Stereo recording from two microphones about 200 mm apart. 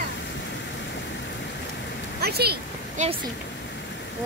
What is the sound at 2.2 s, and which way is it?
Speech, 50° right (ahead or behind).